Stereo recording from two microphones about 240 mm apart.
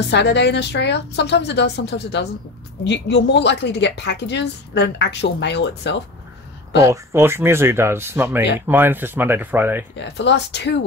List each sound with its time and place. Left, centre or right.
0.1 s a woman's voice: left
6.8 s speech: centre
9.9 s a woman's voice: left